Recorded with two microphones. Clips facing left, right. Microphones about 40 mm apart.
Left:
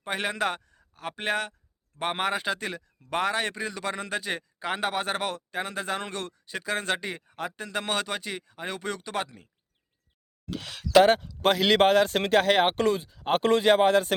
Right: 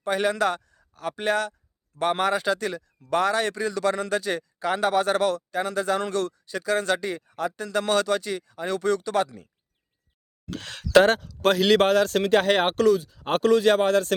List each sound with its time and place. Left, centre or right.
0.0 s speech: left
10.5 s speech: centre
11.1 s speech: centre
12.3 s speech: centre
12.7 s speech: left
13.1 s speech: centre
13.4 s speech: left
13.7 s speech: centre